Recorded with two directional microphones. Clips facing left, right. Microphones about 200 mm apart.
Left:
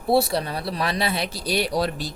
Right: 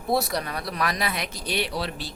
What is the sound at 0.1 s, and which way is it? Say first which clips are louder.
Speech: left 5 dB; 30° left (ahead or behind).